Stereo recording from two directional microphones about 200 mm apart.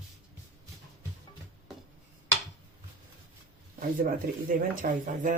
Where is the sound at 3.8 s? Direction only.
45° right (ahead or behind).